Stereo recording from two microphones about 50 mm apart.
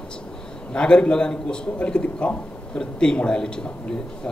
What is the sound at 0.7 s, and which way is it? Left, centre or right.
A man's voice, left.